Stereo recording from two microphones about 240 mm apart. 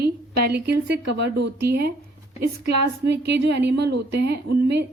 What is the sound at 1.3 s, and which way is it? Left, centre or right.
Speech, right.